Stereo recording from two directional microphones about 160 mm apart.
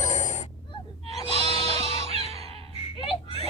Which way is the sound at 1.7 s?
40° right (ahead or behind).